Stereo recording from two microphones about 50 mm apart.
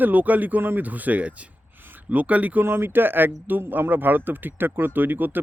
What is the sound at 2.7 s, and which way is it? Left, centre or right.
Speech, right.